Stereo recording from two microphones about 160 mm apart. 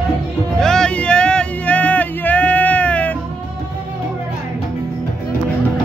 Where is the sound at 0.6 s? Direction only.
5° left (ahead or behind).